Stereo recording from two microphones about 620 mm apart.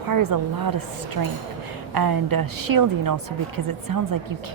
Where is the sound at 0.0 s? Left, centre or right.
Right.